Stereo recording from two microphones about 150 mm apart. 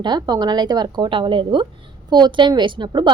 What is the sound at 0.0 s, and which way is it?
A woman's voice, 30° right (ahead or behind).